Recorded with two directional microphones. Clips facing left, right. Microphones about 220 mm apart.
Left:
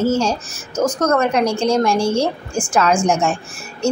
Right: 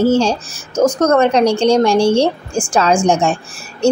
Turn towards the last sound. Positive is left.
turn(degrees=-30)  # may be behind; listen again after turning